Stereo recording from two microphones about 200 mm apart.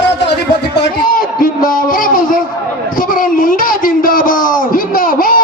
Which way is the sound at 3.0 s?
45° left (ahead or behind).